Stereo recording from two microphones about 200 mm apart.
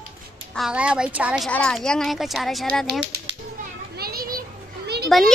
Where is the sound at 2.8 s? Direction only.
55° right (ahead or behind).